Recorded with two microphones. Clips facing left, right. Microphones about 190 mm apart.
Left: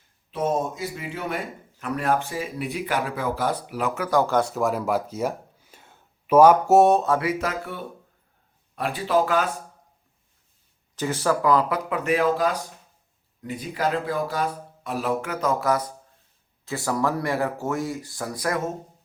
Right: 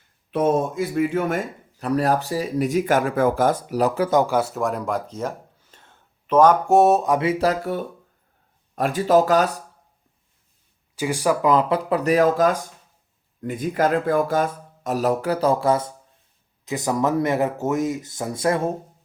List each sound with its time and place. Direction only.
0.3 s speech: 60° right (ahead or behind); by 4.2 s 30° right (ahead or behind)
4.2 s speech: 10° right (ahead or behind)
7.0 s speech: 15° right (ahead or behind)
7.3 s speech: 35° right (ahead or behind)
10.9 s speech: 10° right (ahead or behind)
11.9 s speech: 35° right (ahead or behind)